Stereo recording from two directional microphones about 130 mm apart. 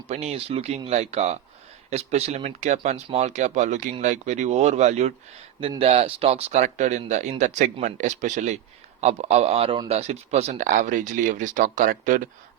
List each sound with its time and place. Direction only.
0.1 s speech: 55° right (ahead or behind)
5.8 s speech: 50° right (ahead or behind)
6.6 s speech: 65° right (ahead or behind); by 12.3 s 90° right